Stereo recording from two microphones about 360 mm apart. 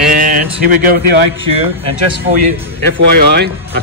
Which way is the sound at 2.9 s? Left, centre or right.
Right.